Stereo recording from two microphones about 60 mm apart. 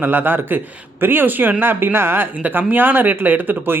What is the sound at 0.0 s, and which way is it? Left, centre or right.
Speech, right.